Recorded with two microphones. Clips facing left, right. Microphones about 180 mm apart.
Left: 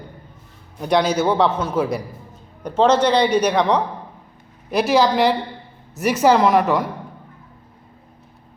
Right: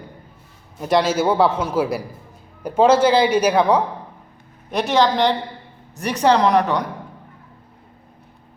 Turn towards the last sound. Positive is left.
turn(degrees=5)  # may be behind; listen again after turning